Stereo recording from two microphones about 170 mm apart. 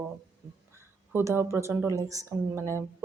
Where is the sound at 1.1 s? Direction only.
15° right (ahead or behind).